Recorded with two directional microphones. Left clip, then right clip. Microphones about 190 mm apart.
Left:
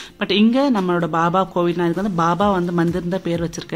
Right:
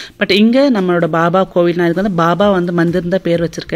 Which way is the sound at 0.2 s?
20° right (ahead or behind).